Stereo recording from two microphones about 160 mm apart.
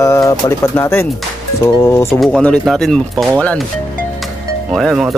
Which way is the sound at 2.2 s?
5° left (ahead or behind).